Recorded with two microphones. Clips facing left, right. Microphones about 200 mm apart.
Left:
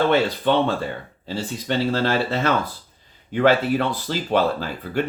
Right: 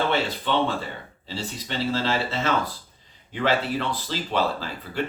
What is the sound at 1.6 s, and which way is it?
Speech, 55° left (ahead or behind).